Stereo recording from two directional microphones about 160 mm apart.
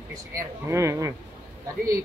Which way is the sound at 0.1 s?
20° right (ahead or behind).